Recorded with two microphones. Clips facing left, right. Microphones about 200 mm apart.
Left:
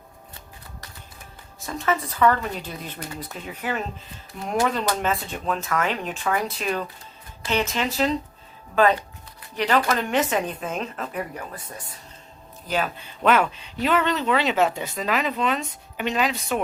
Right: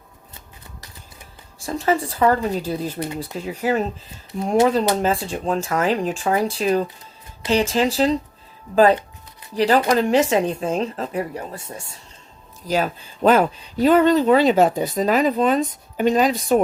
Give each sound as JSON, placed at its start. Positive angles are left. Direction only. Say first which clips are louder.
{"t": 1.6, "sound": "speech", "louder": "right 5 dB", "side_deg": -30}
{"t": 4.7, "sound": "speech", "louder": "right 6 dB", "side_deg": -35}
{"t": 12.6, "sound": "speech", "louder": "right 5 dB", "side_deg": -40}